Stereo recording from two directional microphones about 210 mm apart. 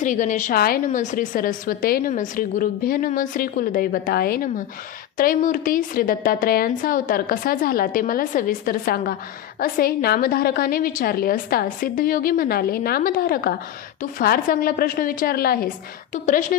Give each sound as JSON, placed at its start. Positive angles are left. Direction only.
{"t": 0.0, "sound": "a woman's voice", "side_deg": 35}